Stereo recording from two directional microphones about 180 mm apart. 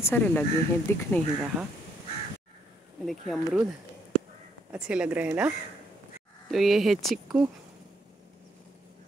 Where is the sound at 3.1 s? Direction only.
Centre (ahead or behind).